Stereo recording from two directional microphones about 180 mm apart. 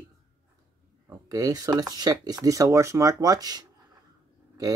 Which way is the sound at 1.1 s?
20° right (ahead or behind).